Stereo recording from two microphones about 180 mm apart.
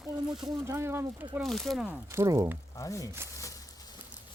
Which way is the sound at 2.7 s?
20° left (ahead or behind).